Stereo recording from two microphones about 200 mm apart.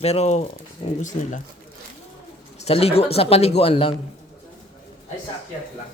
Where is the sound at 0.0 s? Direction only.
30° left (ahead or behind).